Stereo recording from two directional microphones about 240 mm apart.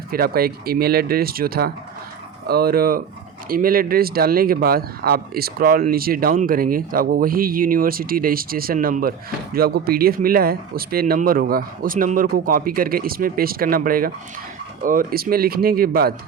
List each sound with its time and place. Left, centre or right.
0.1 s speech: right